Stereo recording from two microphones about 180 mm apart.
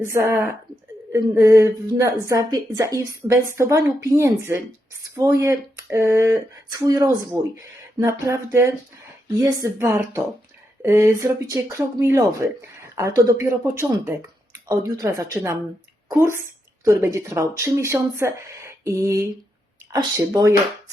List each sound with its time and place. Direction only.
0.0 s a woman's voice: 15° right (ahead or behind)